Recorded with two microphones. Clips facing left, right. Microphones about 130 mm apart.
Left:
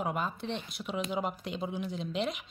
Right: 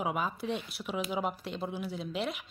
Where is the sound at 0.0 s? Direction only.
5° right (ahead or behind).